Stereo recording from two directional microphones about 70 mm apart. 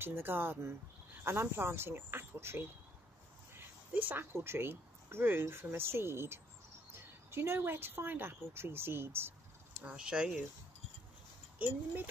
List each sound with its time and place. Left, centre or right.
0.0 s speech: right
3.9 s speech: right
9.8 s speech: centre
11.6 s speech: right